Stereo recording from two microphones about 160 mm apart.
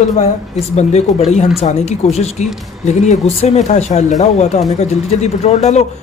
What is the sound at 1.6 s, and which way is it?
Speech, 45° left (ahead or behind).